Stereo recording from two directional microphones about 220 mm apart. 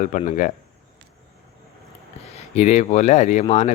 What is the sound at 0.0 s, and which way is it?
Speech, 35° left (ahead or behind).